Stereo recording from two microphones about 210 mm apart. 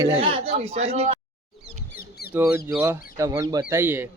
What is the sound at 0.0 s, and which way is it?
Speech, 25° right (ahead or behind).